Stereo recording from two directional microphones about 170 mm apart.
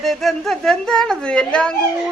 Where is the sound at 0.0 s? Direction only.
Centre (ahead or behind).